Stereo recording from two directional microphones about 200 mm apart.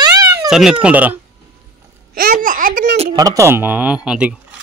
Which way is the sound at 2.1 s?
45° right (ahead or behind).